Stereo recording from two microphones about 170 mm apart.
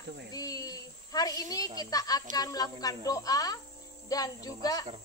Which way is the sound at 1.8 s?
20° left (ahead or behind).